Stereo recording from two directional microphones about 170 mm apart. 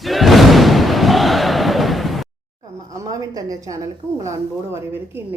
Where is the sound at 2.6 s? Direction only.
20° right (ahead or behind).